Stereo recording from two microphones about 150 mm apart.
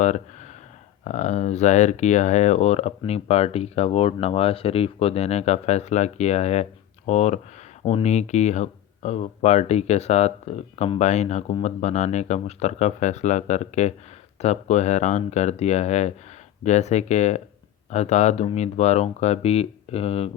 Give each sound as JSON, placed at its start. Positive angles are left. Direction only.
{"t": 1.0, "sound": "speech", "side_deg": 50}